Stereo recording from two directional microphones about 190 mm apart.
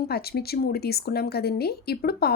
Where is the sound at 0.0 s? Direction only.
55° left (ahead or behind).